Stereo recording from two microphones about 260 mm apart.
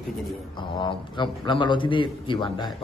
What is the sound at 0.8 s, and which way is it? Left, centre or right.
A man's voice, centre.